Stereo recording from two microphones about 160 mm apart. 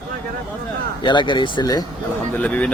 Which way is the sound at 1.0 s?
30° left (ahead or behind).